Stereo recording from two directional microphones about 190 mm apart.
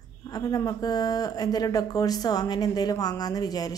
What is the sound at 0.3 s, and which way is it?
Speech, 20° left (ahead or behind).